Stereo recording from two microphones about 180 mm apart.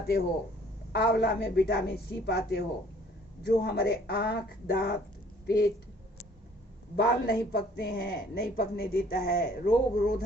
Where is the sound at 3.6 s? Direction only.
65° left (ahead or behind).